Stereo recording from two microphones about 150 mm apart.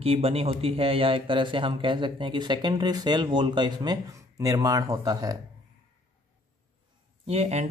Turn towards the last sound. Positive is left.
turn(degrees=-45)  # may be behind; listen again after turning